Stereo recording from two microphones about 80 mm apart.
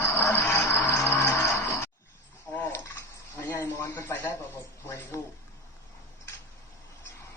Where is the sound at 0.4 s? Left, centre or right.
Left.